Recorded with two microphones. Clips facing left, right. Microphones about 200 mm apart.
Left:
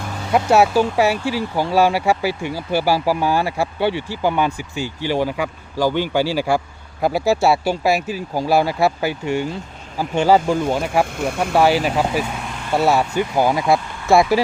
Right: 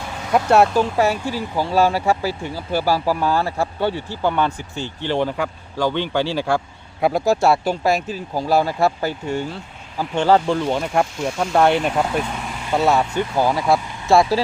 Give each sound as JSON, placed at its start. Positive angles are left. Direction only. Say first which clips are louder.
{"t": 0.3, "sound": "speech", "louder": "left 1 dB", "side_deg": 5}
{"t": 11.0, "sound": "speech", "louder": "left 1 dB", "side_deg": 55}
{"t": 11.5, "sound": "speech", "louder": "even", "side_deg": 5}